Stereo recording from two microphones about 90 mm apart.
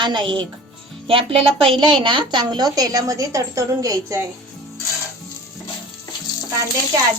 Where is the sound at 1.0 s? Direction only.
90° right.